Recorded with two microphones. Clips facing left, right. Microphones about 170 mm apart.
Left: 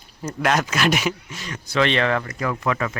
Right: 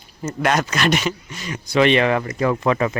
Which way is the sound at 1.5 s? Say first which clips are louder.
Right 5 dB; 15° right (ahead or behind).